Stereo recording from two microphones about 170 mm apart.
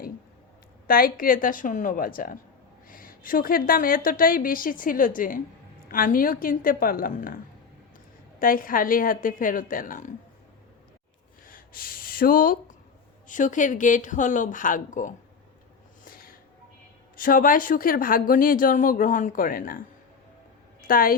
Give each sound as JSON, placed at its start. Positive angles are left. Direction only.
{"t": 0.9, "sound": "speech", "side_deg": 60}
{"t": 8.4, "sound": "speech", "side_deg": 55}
{"t": 11.4, "sound": "gasp", "side_deg": 55}
{"t": 13.2, "sound": "a woman's voice", "side_deg": 50}
{"t": 16.0, "sound": "a sound", "side_deg": 60}
{"t": 17.2, "sound": "speech", "side_deg": 55}
{"t": 20.8, "sound": "a woman's voice", "side_deg": 55}